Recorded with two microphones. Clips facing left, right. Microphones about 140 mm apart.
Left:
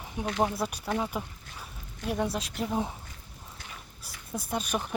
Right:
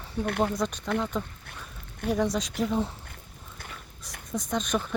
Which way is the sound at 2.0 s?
60° right (ahead or behind).